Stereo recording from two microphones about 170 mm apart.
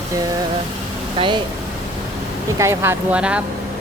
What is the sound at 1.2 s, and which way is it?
Speech, 30° right (ahead or behind).